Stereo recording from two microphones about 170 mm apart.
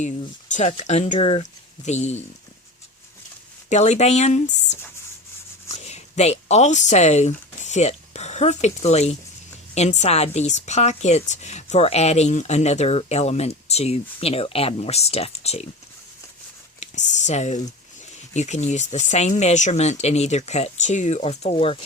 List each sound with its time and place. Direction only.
0.5 s speech: 40° left (ahead or behind)
3.7 s speech: 40° left (ahead or behind)
16.8 s a sound: 45° left (ahead or behind)
18.3 s speech: 45° left (ahead or behind)